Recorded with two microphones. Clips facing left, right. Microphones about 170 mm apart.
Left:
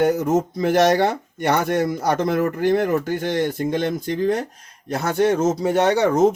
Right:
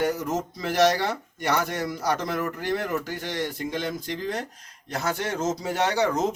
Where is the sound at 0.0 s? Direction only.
55° left (ahead or behind).